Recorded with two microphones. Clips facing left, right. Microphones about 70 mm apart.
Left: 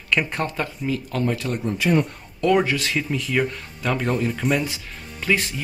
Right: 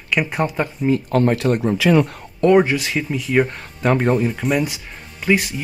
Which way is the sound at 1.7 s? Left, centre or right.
Right.